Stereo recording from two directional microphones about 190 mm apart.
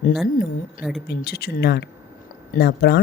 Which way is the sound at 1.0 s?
55° left (ahead or behind).